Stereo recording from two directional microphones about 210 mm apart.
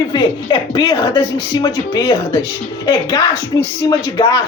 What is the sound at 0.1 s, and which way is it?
Speech, 20° left (ahead or behind).